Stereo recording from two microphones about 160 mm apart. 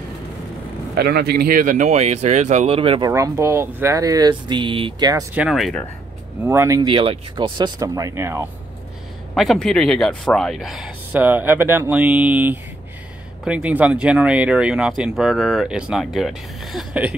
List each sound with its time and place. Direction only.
0.9 s speech: 90° right; by 3.1 s 35° right (ahead or behind)
3.1 s speech: 15° right (ahead or behind)
5.3 s speech: 5° right (ahead or behind)
6.4 s speech: 15° right (ahead or behind)
6.9 s speech: 35° right (ahead or behind); by 8.5 s 15° right (ahead or behind)
9.3 s speech: centre (ahead or behind)